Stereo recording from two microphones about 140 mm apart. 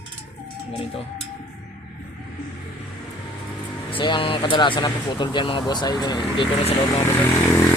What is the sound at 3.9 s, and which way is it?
Speech, 35° left (ahead or behind).